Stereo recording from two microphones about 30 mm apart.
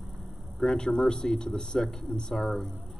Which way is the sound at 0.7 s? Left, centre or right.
Left.